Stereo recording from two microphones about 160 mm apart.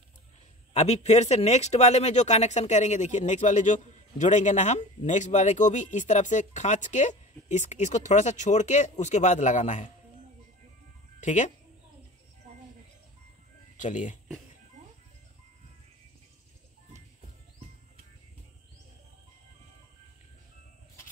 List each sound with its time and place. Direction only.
0.7 s speech: 45° left (ahead or behind)
11.1 s speech: 50° left (ahead or behind)
13.7 s speech: 50° left (ahead or behind)